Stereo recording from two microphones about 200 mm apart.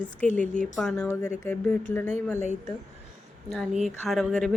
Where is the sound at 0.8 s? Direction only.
5° left (ahead or behind).